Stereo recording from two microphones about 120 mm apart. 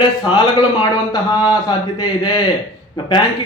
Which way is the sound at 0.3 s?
35° left (ahead or behind).